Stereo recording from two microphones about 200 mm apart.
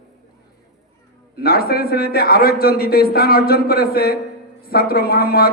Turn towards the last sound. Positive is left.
turn(degrees=50)  # may be behind; listen again after turning